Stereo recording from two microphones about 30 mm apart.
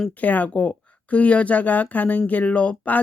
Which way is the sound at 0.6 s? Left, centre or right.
Left.